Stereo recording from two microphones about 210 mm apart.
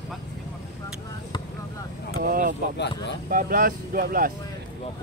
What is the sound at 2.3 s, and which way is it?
Speech, 40° right (ahead or behind).